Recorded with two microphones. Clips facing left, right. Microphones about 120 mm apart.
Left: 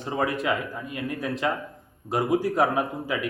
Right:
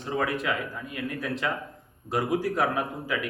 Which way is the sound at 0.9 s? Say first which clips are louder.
Left 2 dB; 25° left (ahead or behind).